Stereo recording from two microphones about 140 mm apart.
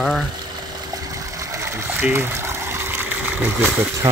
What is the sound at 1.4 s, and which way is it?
Water, 20° right (ahead or behind).